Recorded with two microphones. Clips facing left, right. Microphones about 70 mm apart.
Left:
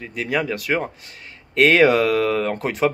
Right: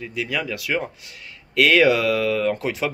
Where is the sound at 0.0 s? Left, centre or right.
Left.